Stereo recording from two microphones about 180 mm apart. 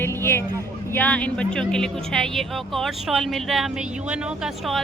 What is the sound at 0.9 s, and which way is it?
Speech, 10° left (ahead or behind).